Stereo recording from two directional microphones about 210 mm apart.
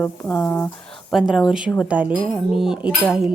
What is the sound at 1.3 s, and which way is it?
A child's voice, 5° right (ahead or behind).